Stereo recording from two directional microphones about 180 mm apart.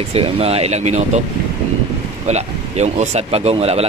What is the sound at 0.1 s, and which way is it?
Speech, 35° right (ahead or behind).